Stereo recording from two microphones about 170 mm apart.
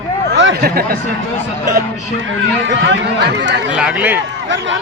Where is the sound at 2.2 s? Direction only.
90° right.